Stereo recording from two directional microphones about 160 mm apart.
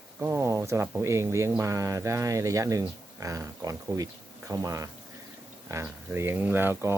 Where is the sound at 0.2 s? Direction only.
20° right (ahead or behind).